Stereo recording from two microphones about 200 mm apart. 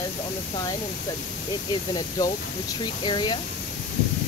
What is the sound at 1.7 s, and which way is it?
Speech, 20° left (ahead or behind).